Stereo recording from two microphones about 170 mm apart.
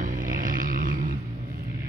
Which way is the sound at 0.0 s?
55° right (ahead or behind).